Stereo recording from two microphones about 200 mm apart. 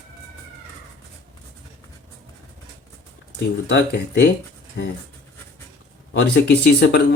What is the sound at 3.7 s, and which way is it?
Speech, 60° left (ahead or behind).